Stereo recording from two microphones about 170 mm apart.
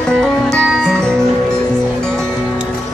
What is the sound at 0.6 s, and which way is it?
Music, centre (ahead or behind).